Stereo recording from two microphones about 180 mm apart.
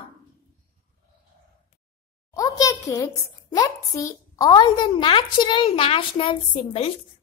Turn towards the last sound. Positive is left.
turn(degrees=30)  # may be behind; listen again after turning